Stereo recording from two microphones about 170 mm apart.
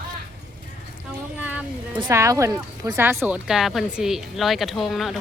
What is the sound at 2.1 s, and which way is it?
Speech, 15° right (ahead or behind).